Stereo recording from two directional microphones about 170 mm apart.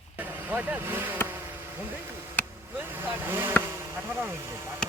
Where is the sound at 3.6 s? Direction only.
15° right (ahead or behind).